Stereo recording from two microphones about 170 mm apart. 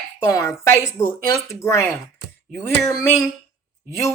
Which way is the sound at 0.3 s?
20° left (ahead or behind).